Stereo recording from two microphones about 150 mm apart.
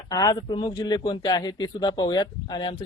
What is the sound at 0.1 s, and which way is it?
A man's voice, 25° left (ahead or behind).